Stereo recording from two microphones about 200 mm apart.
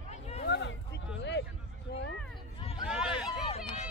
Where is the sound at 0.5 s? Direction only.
60° left (ahead or behind).